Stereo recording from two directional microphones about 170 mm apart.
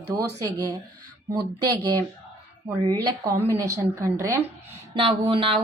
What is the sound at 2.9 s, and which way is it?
A woman's voice, 20° right (ahead or behind).